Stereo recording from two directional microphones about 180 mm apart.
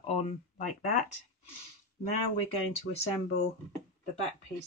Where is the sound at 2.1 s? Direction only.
35° left (ahead or behind).